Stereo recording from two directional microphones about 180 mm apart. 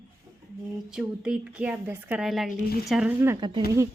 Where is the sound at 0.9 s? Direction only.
5° right (ahead or behind).